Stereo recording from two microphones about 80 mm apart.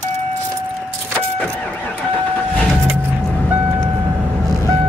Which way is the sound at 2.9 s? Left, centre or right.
Right.